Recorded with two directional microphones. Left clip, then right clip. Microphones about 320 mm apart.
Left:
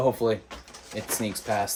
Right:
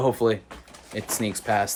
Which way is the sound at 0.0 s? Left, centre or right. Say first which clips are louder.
Right 2 dB; centre.